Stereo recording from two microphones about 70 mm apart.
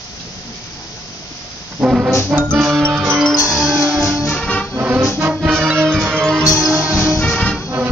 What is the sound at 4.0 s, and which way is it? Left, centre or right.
Music, left.